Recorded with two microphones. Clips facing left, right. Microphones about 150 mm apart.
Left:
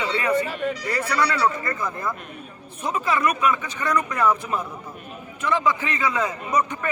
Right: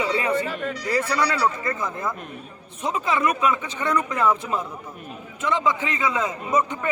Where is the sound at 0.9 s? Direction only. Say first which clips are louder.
Right 2 dB; 20° right (ahead or behind).